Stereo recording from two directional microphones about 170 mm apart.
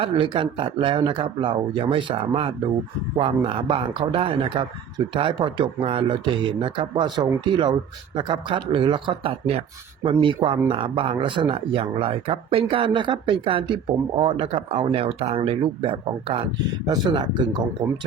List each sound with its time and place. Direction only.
0.0 s speech: 30° right (ahead or behind)